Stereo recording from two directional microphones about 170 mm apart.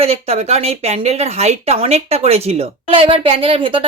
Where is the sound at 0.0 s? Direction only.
35° right (ahead or behind).